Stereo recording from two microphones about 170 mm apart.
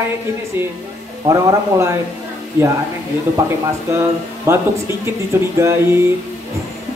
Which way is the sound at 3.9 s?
15° right (ahead or behind).